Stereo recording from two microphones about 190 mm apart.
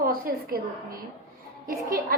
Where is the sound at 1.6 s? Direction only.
50° right (ahead or behind).